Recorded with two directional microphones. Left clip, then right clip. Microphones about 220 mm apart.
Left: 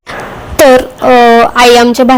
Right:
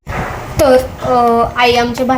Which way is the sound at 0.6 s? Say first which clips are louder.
Left 6 dB; 45° left (ahead or behind).